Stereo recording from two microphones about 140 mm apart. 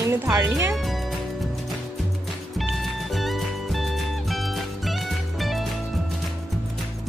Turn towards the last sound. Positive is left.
turn(degrees=0)  # may be behind; listen again after turning